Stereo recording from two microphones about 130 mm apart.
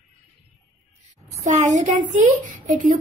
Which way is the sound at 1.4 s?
70° right (ahead or behind).